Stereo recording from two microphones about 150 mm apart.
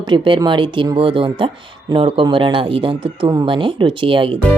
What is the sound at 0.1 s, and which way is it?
Speech, 30° right (ahead or behind).